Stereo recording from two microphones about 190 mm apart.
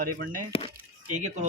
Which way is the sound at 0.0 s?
50° right (ahead or behind).